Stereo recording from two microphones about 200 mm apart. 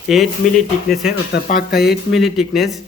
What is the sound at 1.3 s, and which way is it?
Speech, 50° left (ahead or behind).